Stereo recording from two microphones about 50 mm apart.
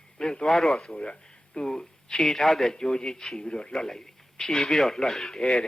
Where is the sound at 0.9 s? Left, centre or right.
Centre.